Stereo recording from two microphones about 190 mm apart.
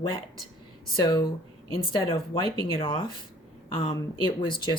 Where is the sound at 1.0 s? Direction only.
25° left (ahead or behind).